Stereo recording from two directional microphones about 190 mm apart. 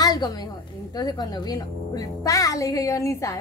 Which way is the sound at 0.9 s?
20° left (ahead or behind).